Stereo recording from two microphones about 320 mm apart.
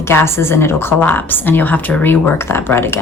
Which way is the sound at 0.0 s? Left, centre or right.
Centre.